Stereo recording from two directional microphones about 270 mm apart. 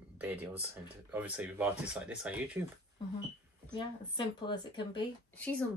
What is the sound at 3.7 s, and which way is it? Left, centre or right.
Speech, centre.